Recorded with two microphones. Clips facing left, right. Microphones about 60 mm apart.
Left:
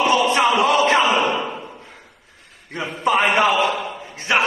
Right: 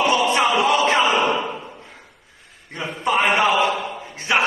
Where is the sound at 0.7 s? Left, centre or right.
Centre.